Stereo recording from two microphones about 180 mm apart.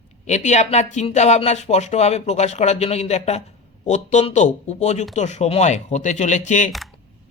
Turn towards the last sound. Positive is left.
turn(degrees=40)  # may be behind; listen again after turning